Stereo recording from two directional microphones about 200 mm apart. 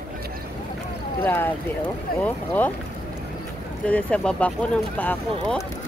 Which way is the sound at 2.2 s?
10° left (ahead or behind).